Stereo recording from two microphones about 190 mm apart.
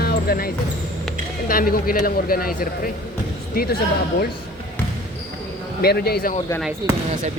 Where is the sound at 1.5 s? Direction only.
50° left (ahead or behind).